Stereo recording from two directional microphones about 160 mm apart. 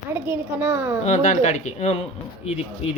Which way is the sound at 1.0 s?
50° left (ahead or behind).